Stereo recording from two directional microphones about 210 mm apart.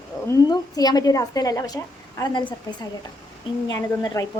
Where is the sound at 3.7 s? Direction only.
15° left (ahead or behind).